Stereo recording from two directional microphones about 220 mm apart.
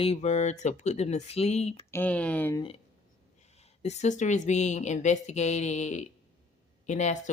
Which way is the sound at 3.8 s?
30° left (ahead or behind).